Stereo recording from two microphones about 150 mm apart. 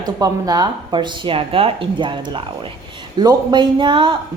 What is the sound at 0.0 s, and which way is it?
A woman's voice, 25° right (ahead or behind).